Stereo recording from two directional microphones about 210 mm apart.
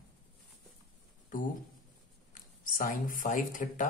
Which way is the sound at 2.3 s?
40° left (ahead or behind).